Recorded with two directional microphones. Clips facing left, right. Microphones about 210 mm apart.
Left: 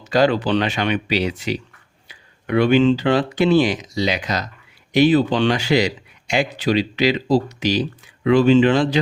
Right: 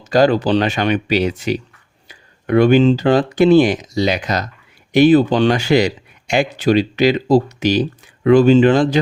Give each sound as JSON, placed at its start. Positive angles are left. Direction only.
{"t": 0.0, "sound": "a man's voice", "side_deg": -45}